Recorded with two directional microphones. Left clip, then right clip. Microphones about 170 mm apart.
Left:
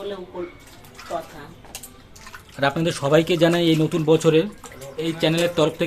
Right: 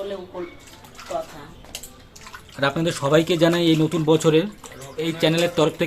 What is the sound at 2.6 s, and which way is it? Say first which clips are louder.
A man's voice: even; centre (ahead or behind).